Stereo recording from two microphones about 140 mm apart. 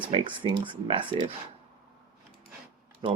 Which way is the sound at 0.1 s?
35° right (ahead or behind).